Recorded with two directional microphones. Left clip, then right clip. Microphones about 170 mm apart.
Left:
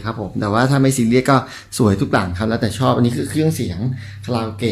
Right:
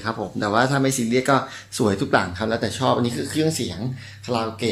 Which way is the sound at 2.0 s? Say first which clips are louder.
Left 2 dB; 10° left (ahead or behind).